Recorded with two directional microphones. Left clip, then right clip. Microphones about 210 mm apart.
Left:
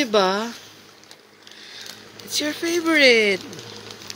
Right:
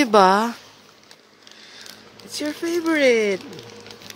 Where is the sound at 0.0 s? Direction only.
30° right (ahead or behind).